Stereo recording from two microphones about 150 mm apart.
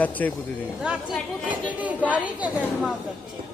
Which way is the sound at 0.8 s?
5° right (ahead or behind).